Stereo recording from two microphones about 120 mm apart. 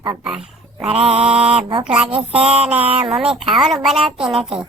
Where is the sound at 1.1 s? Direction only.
50° right (ahead or behind).